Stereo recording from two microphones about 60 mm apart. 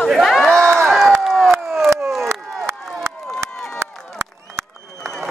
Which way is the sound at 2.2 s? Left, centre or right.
Right.